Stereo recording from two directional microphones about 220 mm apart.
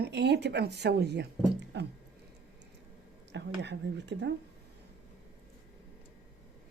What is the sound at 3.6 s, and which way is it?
Speech, 55° right (ahead or behind).